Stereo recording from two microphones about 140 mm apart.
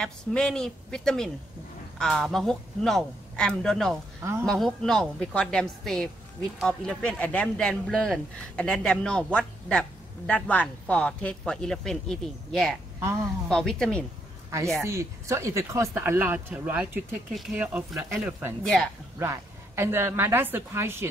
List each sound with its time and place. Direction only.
0.0 s speech: 5° left (ahead or behind)
4.2 s speech: 20° right (ahead or behind)
4.5 s speech: centre (ahead or behind)
13.0 s speech: 20° right (ahead or behind)
13.5 s speech: 5° left (ahead or behind)
14.8 s speech: 20° right (ahead or behind)
17.3 s speech: centre (ahead or behind)
18.6 s speech: centre (ahead or behind)
19.1 s speech: 20° right (ahead or behind)